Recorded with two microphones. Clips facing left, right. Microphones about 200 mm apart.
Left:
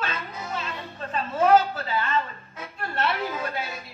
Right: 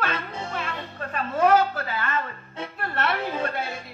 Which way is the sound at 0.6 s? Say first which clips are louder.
Right 2 dB; 60° right (ahead or behind).